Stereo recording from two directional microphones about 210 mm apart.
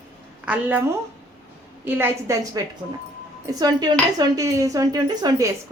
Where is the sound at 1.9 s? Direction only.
10° right (ahead or behind).